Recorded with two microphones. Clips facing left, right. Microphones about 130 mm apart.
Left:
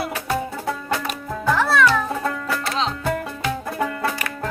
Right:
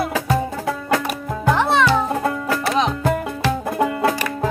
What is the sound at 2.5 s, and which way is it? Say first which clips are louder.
Music: right 5 dB; 55° right (ahead or behind).